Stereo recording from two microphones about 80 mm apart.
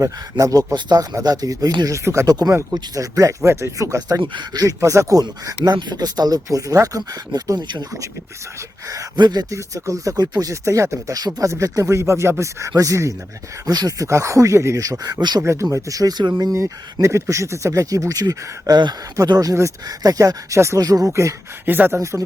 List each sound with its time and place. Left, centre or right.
0.0 s speech: right
1.9 s speech: right
2.2 s speech: right
5.7 s speech: right
9.1 s speech: right
9.5 s speech: right
10.5 s speech: right
14.1 s speech: right
15.0 s speech: right
15.6 s speech: right
16.4 s speech: right
20.8 s speech: right
21.1 s speech: right
21.7 s speech: right